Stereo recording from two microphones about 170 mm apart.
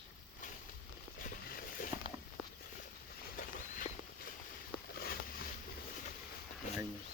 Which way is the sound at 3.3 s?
60° left (ahead or behind).